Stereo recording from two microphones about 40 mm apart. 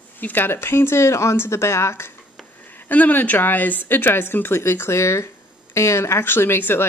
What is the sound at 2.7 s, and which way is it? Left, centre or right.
Speech, left.